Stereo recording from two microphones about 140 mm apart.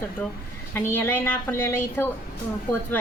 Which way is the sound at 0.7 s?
15° left (ahead or behind).